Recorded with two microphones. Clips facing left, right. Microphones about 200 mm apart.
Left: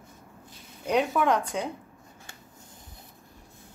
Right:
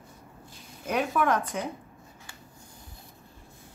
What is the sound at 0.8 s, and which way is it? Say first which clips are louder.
Speech: left 2 dB; 15° left (ahead or behind).